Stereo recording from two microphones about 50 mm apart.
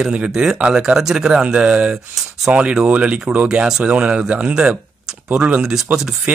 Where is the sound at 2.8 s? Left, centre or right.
Right.